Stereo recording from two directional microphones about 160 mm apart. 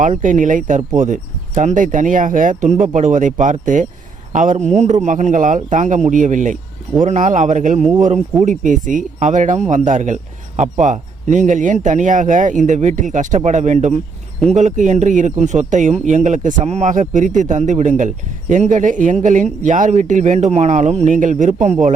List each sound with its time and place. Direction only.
0.0 s speech: 55° right (ahead or behind)